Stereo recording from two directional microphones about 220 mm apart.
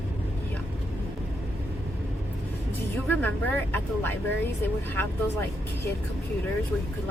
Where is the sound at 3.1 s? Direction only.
10° left (ahead or behind).